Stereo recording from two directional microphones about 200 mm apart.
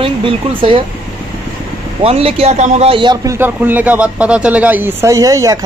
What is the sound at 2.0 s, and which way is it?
A man's voice, 30° right (ahead or behind).